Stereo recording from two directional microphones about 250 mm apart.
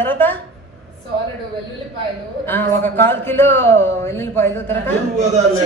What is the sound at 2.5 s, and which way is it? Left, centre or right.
A woman's voice, centre.